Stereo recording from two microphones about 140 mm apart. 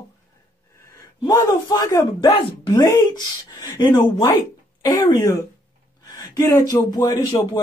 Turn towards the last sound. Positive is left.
turn(degrees=25)  # may be behind; listen again after turning